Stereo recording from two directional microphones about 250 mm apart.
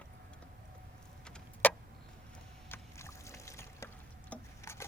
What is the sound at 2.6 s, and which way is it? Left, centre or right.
Boat, centre.